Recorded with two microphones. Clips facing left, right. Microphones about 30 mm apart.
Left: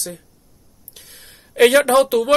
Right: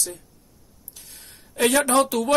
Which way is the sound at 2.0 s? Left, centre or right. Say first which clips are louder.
Left 6 dB; left.